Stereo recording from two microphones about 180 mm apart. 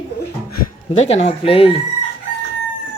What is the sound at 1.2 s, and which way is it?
Speech, 30° left (ahead or behind).